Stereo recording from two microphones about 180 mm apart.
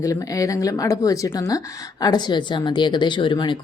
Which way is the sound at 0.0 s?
20° left (ahead or behind).